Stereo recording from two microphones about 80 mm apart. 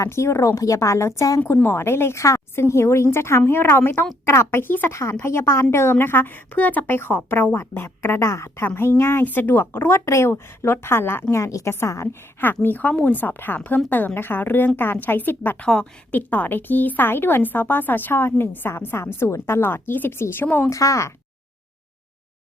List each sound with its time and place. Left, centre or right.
0.0 s a woman's voice: left
1.6 s a woman's voice: left
12.6 s a woman's voice: left
15.6 s a woman's voice: centre
16.3 s a woman's voice: left
20.7 s a woman's voice: left